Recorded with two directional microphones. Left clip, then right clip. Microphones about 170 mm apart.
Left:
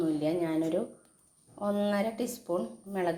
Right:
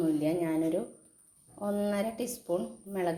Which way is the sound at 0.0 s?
Centre (ahead or behind).